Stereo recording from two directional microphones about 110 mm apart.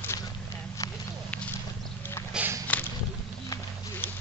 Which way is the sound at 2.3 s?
10° right (ahead or behind).